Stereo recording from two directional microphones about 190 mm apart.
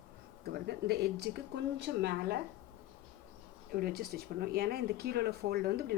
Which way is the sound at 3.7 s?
50° right (ahead or behind).